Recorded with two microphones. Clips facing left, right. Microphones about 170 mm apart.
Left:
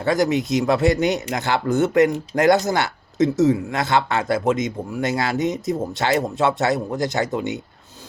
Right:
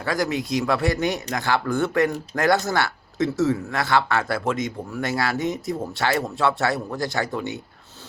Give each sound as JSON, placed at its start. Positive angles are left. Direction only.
{"t": 0.0, "sound": "speech", "side_deg": 20}